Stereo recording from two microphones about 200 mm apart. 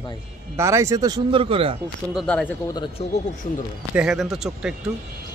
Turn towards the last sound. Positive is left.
turn(degrees=-5)  # may be behind; listen again after turning